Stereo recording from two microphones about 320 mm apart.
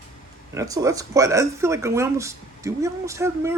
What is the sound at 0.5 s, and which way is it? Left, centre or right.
Speech, centre.